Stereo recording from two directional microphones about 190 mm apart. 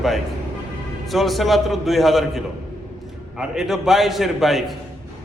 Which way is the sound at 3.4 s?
Centre (ahead or behind).